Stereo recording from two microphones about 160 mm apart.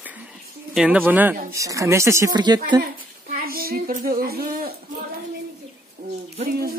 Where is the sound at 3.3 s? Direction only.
65° right (ahead or behind).